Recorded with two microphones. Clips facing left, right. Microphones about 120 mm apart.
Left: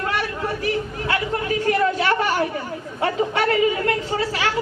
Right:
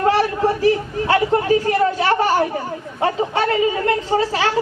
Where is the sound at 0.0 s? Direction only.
35° right (ahead or behind).